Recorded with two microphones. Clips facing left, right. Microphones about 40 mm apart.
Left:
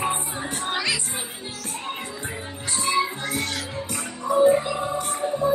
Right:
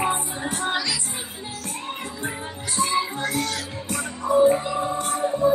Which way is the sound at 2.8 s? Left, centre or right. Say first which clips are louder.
Even; centre.